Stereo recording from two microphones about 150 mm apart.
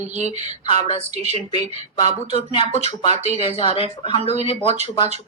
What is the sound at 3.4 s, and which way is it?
Speech, 40° left (ahead or behind).